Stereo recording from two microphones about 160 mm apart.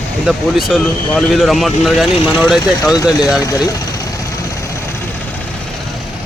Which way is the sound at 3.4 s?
20° left (ahead or behind).